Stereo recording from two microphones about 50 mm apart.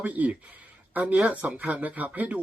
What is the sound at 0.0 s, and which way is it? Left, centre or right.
Speech, right.